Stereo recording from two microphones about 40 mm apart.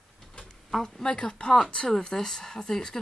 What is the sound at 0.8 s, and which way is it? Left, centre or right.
Speech, centre.